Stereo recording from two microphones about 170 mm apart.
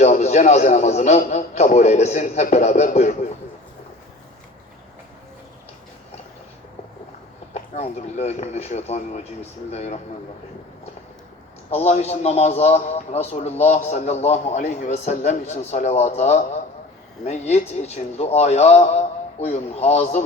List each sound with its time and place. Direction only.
0.0 s a man's voice: 40° left (ahead or behind)
7.5 s a man's voice: 40° left (ahead or behind)
11.7 s a man's voice: 40° left (ahead or behind)